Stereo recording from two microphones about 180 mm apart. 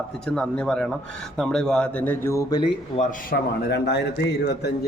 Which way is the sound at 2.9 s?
30° left (ahead or behind).